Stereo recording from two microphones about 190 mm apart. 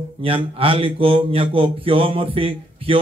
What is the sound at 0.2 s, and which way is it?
A man's voice, 30° right (ahead or behind).